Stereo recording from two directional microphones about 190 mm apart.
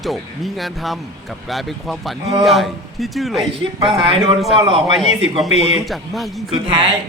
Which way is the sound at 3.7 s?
25° right (ahead or behind).